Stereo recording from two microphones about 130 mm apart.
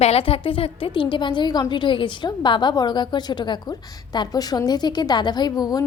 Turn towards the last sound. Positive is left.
turn(degrees=30)  # may be behind; listen again after turning